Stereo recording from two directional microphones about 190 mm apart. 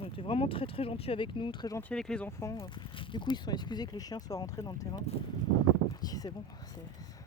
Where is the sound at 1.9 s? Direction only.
5° left (ahead or behind); by 6.3 s 20° left (ahead or behind).